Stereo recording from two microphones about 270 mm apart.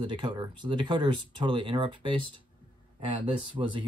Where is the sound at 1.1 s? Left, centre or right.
Left.